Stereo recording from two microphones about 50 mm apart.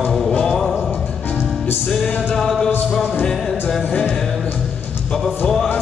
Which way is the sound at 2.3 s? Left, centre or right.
Centre.